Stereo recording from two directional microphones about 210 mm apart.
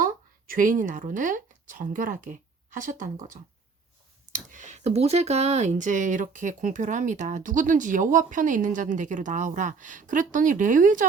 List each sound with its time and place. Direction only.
0.0 s speech: 40° right (ahead or behind)
4.5 s speech: 35° right (ahead or behind)